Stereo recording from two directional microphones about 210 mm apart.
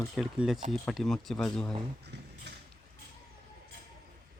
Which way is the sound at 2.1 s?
55° right (ahead or behind).